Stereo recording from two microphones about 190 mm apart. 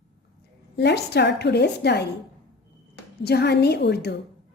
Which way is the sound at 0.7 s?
60° left (ahead or behind).